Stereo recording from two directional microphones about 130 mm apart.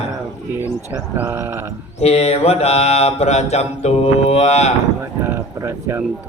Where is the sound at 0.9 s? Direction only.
20° right (ahead or behind).